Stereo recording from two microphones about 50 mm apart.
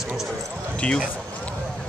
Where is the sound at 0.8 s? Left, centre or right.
Left.